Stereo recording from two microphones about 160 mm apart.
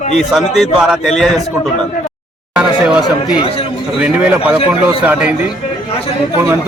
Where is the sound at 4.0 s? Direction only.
5° right (ahead or behind).